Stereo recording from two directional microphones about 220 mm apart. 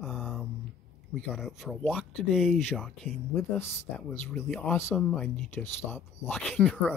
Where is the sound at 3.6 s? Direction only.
10° left (ahead or behind).